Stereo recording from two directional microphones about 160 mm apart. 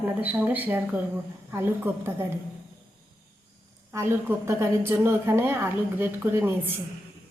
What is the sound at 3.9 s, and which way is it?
A woman's voice, 15° right (ahead or behind).